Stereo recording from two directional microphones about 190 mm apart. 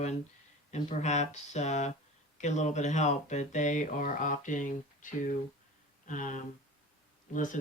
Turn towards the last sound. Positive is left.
turn(degrees=45)  # may be behind; listen again after turning